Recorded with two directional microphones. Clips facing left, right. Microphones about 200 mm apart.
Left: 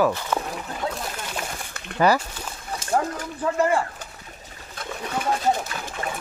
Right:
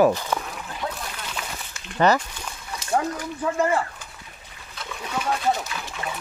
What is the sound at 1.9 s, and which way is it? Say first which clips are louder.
Speech: even; 10° left (ahead or behind).